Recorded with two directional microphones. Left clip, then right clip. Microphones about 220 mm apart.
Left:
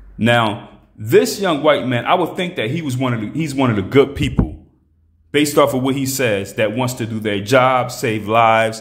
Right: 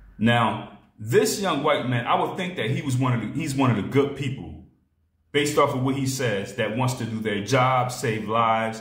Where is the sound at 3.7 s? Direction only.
45° left (ahead or behind).